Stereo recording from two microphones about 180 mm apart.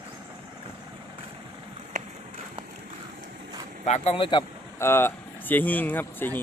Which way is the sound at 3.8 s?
40° left (ahead or behind).